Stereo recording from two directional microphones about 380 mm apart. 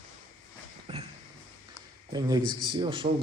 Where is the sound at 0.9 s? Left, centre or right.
Centre.